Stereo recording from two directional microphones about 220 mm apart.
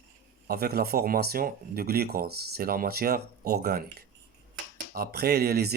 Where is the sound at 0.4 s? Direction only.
45° right (ahead or behind).